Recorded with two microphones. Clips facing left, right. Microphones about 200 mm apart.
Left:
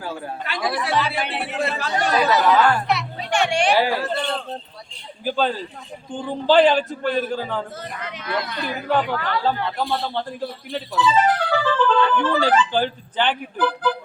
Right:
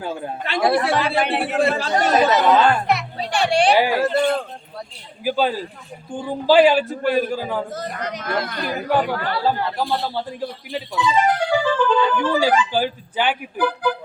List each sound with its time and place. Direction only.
0.0 s speech: 25° right (ahead or behind)
0.8 s speech: 50° right (ahead or behind)
2.0 s speech: 20° right (ahead or behind)
2.8 s music: 50° right (ahead or behind)
3.2 s music: 35° right (ahead or behind)
3.8 s speech: 15° right (ahead or behind)
4.0 s a sound: 45° right (ahead or behind)
5.2 s speech: 10° right (ahead or behind)
7.8 s speech: 40° right (ahead or behind)
9.4 s a man's voice: 5° right (ahead or behind)
10.9 s speech: 10° right (ahead or behind)